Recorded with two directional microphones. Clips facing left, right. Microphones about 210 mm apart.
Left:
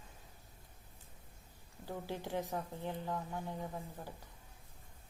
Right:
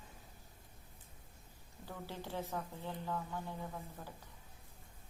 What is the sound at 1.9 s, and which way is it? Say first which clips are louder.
Speech: left 4 dB; 15° left (ahead or behind).